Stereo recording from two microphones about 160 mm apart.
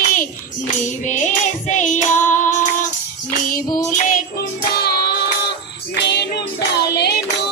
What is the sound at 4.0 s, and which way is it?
Music, 60° left (ahead or behind).